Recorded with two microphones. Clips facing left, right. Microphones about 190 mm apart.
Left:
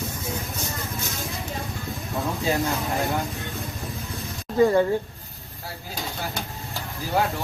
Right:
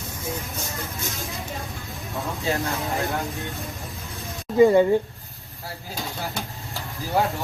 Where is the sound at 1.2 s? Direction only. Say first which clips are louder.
Left 1 dB; centre (ahead or behind).